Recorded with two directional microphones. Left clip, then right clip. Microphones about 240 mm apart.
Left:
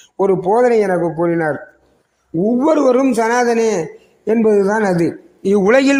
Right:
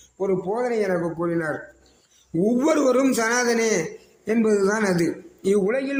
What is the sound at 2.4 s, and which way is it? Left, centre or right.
A man's voice, centre.